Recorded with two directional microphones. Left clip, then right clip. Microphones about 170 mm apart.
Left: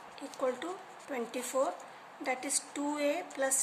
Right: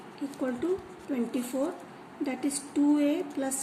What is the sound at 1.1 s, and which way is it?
Speech, 40° left (ahead or behind).